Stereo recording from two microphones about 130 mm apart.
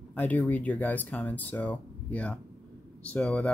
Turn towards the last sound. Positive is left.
turn(degrees=10)  # may be behind; listen again after turning